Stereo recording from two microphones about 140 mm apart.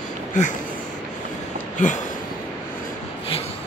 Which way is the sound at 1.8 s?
65° left (ahead or behind).